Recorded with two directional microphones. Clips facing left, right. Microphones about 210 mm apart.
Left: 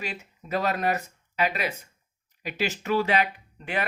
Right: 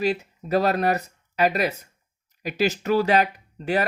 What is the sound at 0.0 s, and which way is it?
Speech, 35° right (ahead or behind).